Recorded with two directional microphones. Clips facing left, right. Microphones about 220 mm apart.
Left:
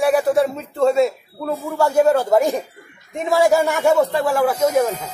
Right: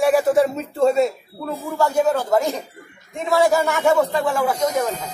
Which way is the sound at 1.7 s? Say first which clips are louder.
Left 3 dB; 10° left (ahead or behind).